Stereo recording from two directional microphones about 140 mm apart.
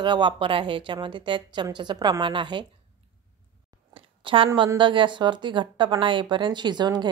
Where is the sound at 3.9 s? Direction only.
40° right (ahead or behind).